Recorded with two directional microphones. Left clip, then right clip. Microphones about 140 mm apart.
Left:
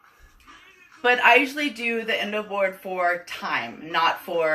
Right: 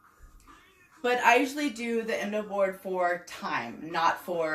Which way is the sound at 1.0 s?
20° right (ahead or behind).